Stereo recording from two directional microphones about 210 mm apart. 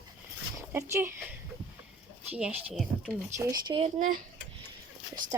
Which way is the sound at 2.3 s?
5° right (ahead or behind).